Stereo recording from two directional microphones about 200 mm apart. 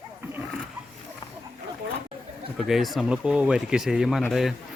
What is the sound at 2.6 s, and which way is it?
Speech, centre (ahead or behind).